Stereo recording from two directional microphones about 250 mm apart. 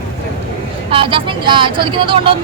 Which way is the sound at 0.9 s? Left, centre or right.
Right.